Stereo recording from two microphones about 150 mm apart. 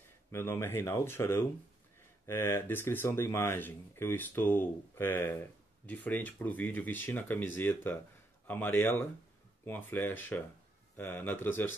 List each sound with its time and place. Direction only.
0.3 s speech: 15° left (ahead or behind)